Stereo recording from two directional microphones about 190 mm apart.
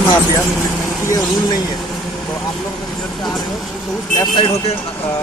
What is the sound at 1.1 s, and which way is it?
Speech, 20° left (ahead or behind).